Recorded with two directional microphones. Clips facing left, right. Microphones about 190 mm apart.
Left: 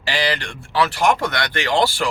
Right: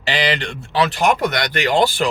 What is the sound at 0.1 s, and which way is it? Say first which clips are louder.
Speech: right 2 dB; 20° right (ahead or behind).